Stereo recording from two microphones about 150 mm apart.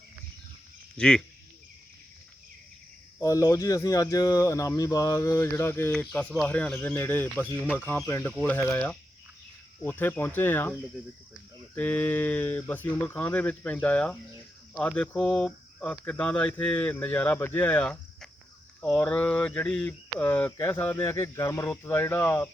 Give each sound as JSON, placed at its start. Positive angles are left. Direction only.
{"t": 0.9, "sound": "speech", "side_deg": 5}
{"t": 3.2, "sound": "speech", "side_deg": 20}